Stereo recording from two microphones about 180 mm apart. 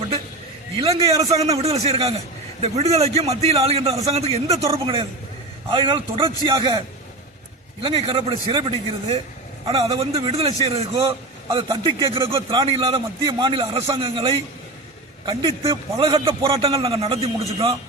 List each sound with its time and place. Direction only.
0.9 s a man's voice: 20° right (ahead or behind)
1.3 s a man's voice: 35° right (ahead or behind)
5.7 s a man's voice: 25° right (ahead or behind)
7.8 s a man's voice: 30° right (ahead or behind)